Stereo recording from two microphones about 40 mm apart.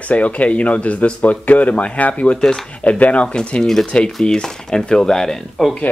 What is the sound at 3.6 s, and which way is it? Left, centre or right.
Speech, centre.